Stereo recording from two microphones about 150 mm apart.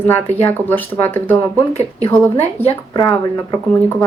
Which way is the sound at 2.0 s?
45° left (ahead or behind).